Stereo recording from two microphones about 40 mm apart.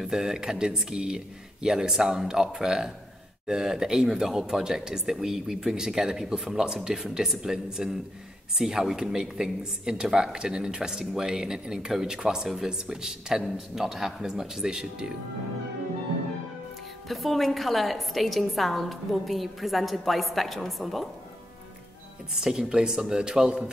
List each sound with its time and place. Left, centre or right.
0.0 s a woman's voice: centre
17.1 s a woman's voice: centre
22.3 s speech: centre